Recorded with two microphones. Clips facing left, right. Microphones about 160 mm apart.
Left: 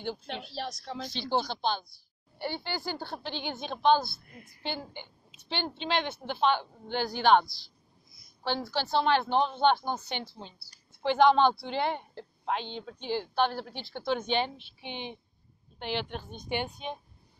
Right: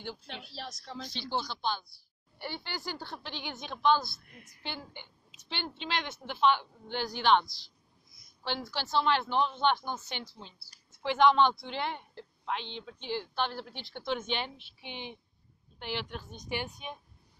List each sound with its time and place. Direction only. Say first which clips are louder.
0.2 s a woman's voice: left 6 dB; 25° left (ahead or behind)
0.6 s a woman's voice: left 5 dB; centre (ahead or behind)
1.0 s speech: left 5 dB; 30° left (ahead or behind); by 7.4 s 45° left (ahead or behind)
8.6 s a woman's voice: left 2 dB; 60° left (ahead or behind)
9.2 s a woman's voice: left 3 dB; 35° left (ahead or behind)